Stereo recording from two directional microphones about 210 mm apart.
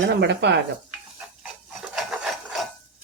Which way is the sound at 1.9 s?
Centre (ahead or behind).